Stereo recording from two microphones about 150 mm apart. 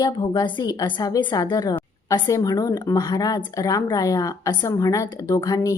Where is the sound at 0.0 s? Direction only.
30° left (ahead or behind).